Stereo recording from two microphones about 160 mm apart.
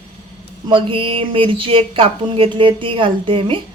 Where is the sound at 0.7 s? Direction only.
35° right (ahead or behind).